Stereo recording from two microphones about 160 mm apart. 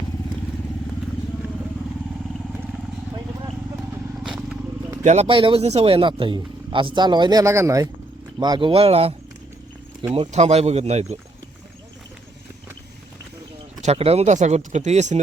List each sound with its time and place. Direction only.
4.2 s vehicle: 5° right (ahead or behind)
5.0 s speech: 40° right (ahead or behind); by 7.9 s 20° right (ahead or behind)
8.4 s speech: 30° right (ahead or behind)
10.2 s speech: 45° right (ahead or behind)
13.8 s speech: 40° right (ahead or behind)